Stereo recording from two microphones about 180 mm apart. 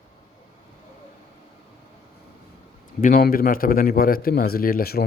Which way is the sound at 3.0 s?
50° left (ahead or behind).